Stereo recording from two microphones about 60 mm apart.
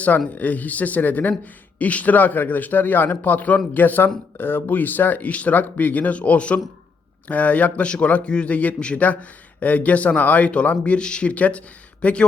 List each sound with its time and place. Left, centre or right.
0.3 s a man's voice: left